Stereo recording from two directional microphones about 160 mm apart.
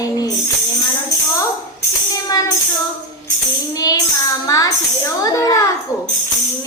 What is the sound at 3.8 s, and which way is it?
A child's voice, 25° left (ahead or behind).